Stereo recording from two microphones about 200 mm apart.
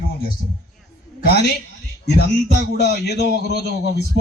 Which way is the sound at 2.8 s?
55° left (ahead or behind).